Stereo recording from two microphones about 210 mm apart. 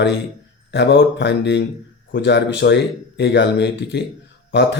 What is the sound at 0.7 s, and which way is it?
Speech, 60° left (ahead or behind).